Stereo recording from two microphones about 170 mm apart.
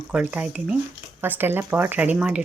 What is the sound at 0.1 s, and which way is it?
Speech, 5° right (ahead or behind).